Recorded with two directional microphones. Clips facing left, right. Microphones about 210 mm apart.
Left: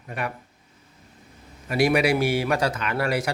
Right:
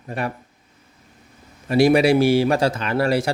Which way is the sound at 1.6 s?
30° right (ahead or behind).